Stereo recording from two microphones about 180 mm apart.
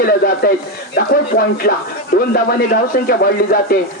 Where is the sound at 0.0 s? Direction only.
55° left (ahead or behind).